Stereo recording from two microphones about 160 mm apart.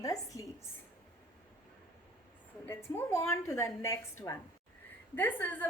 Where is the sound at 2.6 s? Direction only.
15° left (ahead or behind).